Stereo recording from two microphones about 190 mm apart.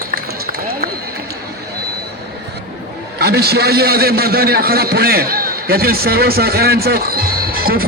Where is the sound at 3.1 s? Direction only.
60° right (ahead or behind).